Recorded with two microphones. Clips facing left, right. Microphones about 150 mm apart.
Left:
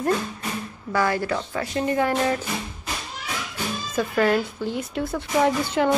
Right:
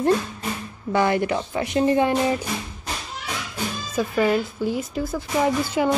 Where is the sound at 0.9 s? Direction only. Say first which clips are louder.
Right 3 dB; 20° right (ahead or behind).